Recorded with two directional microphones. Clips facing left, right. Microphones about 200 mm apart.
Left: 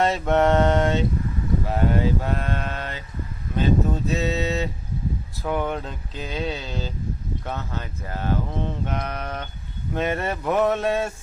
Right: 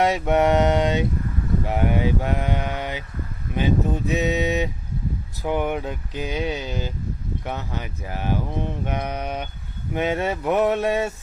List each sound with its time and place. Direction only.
0.0 s speech: 15° right (ahead or behind)